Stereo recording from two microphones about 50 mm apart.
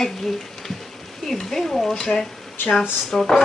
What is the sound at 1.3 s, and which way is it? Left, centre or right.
Speech, centre.